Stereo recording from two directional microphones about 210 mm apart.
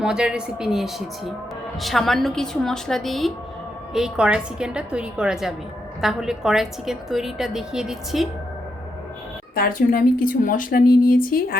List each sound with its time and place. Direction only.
0.0 s a woman's voice: 5° right (ahead or behind)
9.6 s a woman's voice: 45° left (ahead or behind)